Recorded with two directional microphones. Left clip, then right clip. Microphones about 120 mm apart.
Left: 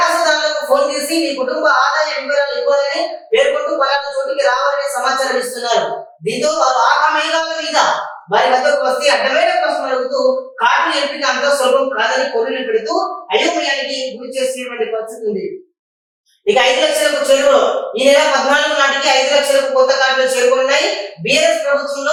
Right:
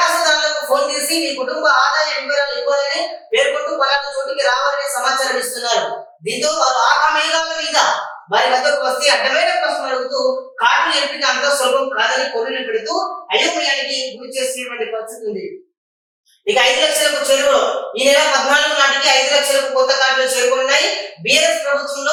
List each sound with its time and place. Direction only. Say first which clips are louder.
0.0 s speech: left 1 dB; 10° left (ahead or behind)
16.5 s speech: left 2 dB; 10° left (ahead or behind)